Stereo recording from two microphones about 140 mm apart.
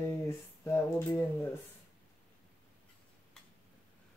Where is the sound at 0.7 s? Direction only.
20° left (ahead or behind).